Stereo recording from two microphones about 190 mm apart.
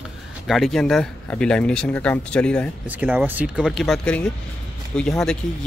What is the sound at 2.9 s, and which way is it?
Speech, 10° right (ahead or behind).